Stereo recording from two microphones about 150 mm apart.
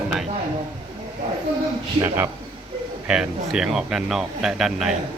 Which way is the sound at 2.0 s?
15° right (ahead or behind).